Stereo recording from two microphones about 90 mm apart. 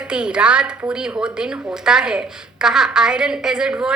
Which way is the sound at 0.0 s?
10° right (ahead or behind).